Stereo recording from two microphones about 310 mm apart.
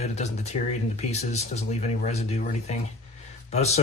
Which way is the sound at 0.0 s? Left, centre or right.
Left.